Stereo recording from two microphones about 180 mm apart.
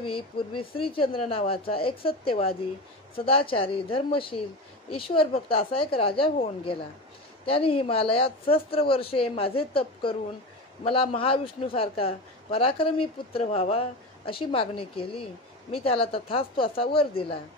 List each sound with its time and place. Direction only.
0.0 s a man's voice: 30° left (ahead or behind)